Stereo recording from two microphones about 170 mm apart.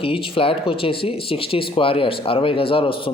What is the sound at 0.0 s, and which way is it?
Speech, 30° left (ahead or behind).